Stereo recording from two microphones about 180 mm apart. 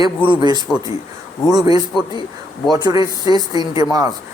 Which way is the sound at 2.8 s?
20° right (ahead or behind).